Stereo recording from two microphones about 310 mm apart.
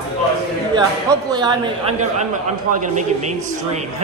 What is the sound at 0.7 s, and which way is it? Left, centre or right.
A man's voice, centre.